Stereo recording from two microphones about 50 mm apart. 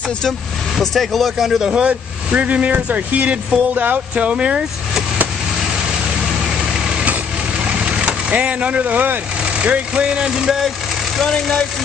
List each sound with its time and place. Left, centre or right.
0.7 s speech: centre
2.3 s speech: right
7.8 s speech: centre
9.7 s speech: right
11.2 s speech: centre